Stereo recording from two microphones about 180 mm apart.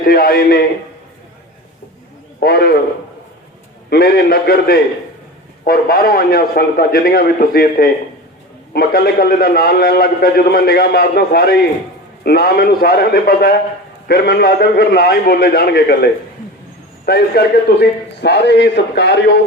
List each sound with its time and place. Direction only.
0.0 s a man's voice: 55° left (ahead or behind)
2.4 s a man's voice: 60° left (ahead or behind)
3.8 s a man's voice: 60° left (ahead or behind)
17.1 s a man's voice: 60° left (ahead or behind)